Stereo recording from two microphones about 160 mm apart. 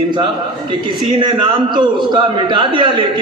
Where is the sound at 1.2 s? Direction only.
30° right (ahead or behind).